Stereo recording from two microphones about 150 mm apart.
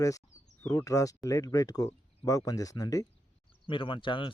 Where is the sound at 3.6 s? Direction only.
35° left (ahead or behind).